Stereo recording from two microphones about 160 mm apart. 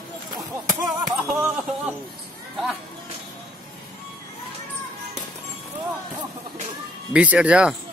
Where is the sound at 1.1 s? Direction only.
5° right (ahead or behind).